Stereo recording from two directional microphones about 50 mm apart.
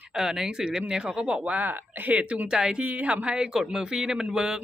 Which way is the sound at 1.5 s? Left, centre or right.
Right.